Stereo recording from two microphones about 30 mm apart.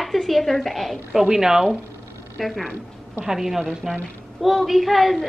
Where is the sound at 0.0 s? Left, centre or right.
Centre.